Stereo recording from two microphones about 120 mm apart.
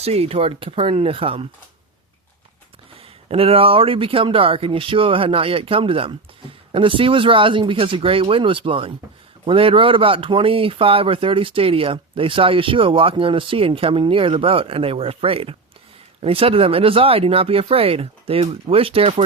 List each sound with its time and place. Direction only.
0.0 s speech: 60° right (ahead or behind)
3.0 s speech: 55° right (ahead or behind)